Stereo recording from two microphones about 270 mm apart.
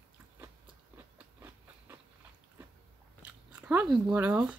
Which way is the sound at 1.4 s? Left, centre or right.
Centre.